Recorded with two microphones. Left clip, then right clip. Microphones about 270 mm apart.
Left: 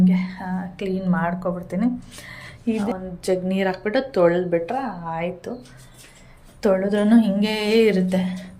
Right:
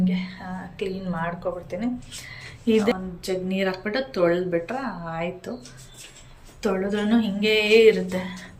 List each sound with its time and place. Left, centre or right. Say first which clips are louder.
0.0 s speech: left 5 dB; centre
6.6 s speech: left 6 dB; centre